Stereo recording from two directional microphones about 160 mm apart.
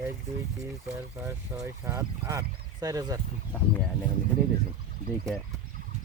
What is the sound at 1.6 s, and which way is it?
Speech, 20° right (ahead or behind).